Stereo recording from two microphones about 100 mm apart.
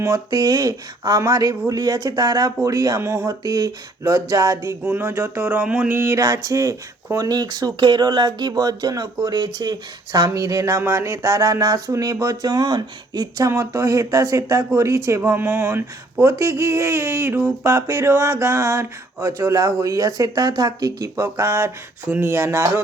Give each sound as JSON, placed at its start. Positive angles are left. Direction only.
{"t": 0.0, "sound": "speech", "side_deg": -35}
{"t": 4.8, "sound": "speech", "side_deg": -20}
{"t": 6.0, "sound": "speech", "side_deg": -30}